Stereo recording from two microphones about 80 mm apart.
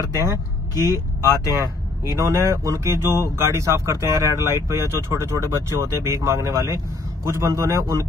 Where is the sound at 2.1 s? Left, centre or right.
Right.